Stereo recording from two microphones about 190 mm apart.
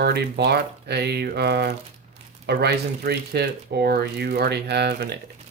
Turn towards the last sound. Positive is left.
turn(degrees=-60)  # may be behind; listen again after turning